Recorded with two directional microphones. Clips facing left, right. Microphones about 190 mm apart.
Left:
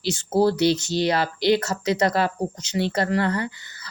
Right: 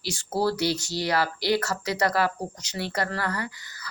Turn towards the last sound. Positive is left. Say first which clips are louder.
# left 4 dB
turn(degrees=25)  # may be behind; listen again after turning